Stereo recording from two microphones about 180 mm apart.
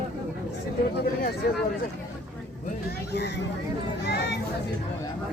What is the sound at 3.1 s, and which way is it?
Speech, 65° left (ahead or behind).